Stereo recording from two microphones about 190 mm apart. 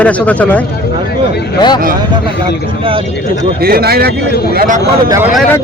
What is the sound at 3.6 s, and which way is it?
Speech, 50° right (ahead or behind).